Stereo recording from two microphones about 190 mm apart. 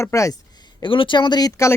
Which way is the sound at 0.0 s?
15° left (ahead or behind).